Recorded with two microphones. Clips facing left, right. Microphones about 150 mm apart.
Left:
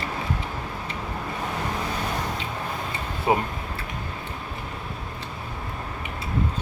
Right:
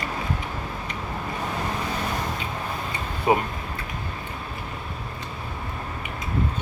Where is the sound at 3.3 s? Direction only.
15° right (ahead or behind).